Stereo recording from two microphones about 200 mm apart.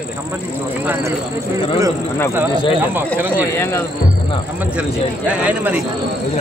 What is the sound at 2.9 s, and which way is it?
Speech, 10° right (ahead or behind).